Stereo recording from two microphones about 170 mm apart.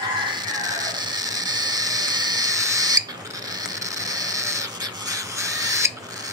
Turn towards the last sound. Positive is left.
turn(degrees=-20)  # may be behind; listen again after turning